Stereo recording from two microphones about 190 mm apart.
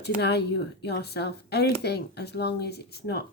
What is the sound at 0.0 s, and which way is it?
Speech, 60° left (ahead or behind).